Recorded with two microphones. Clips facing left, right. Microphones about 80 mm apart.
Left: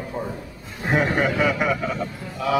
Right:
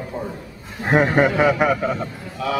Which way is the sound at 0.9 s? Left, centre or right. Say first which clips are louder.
Right 5 dB; right.